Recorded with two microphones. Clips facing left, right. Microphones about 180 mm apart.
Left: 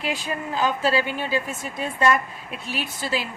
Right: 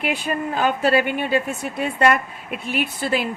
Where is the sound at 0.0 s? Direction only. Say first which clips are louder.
Right 4 dB; 60° right (ahead or behind).